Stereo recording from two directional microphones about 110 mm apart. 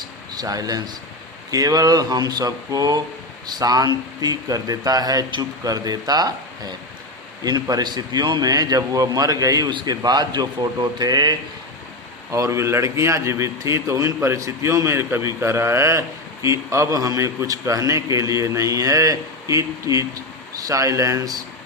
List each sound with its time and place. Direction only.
0.3 s a man's voice: 35° right (ahead or behind)